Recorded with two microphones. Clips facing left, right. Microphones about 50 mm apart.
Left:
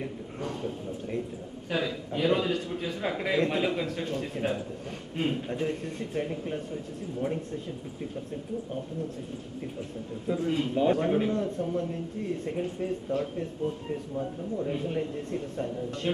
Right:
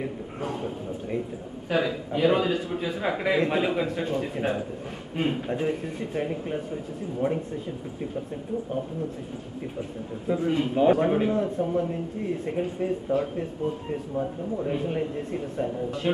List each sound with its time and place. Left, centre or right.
0.0 s a sound: centre
1.7 s speech: centre
9.8 s speech: centre